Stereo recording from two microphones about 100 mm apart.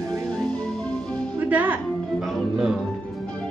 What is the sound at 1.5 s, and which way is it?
Music, 20° right (ahead or behind).